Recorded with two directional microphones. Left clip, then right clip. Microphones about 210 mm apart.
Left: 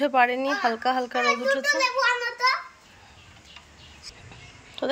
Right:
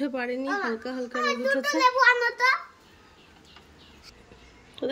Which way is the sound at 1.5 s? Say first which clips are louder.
Left 2 dB; 20° right (ahead or behind).